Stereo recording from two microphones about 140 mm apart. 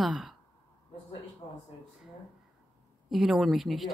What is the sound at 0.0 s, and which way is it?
Sigh, centre (ahead or behind).